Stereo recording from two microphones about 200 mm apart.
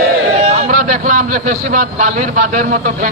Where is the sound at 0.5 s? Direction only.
40° right (ahead or behind).